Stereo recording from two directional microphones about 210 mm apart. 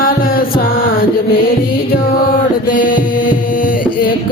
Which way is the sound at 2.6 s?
40° left (ahead or behind).